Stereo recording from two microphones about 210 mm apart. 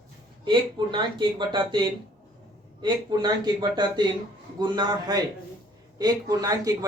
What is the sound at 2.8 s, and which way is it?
Speech, 20° right (ahead or behind).